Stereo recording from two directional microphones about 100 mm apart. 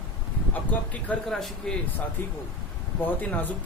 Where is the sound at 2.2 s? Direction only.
15° left (ahead or behind).